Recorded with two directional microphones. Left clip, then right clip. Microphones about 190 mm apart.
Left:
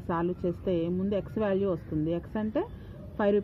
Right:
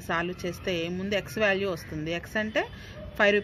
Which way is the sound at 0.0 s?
10° left (ahead or behind).